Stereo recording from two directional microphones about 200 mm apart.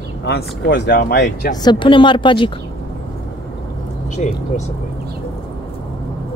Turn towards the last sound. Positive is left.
turn(degrees=35)  # may be behind; listen again after turning